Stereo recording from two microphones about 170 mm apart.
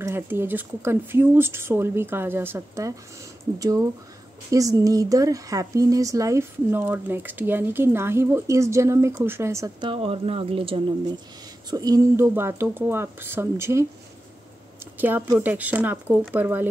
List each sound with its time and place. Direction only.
0.0 s speech: 15° right (ahead or behind)
9.8 s speech: 35° right (ahead or behind)
11.7 s speech: 20° right (ahead or behind)
15.0 s speech: 10° right (ahead or behind)